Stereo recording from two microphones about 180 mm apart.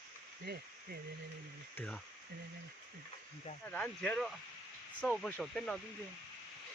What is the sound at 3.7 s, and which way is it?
Speech, 5° left (ahead or behind).